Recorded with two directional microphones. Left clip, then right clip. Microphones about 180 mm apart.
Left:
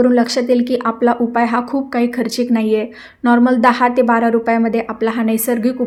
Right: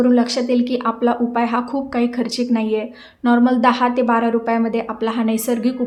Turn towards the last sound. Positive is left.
turn(degrees=20)  # may be behind; listen again after turning